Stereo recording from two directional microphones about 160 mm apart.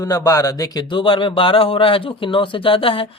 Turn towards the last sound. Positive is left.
turn(degrees=35)  # may be behind; listen again after turning